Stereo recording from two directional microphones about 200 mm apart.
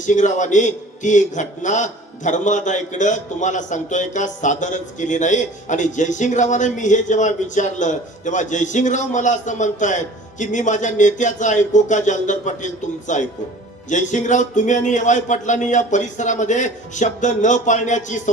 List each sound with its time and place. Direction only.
0.0 s a man's voice: 40° left (ahead or behind)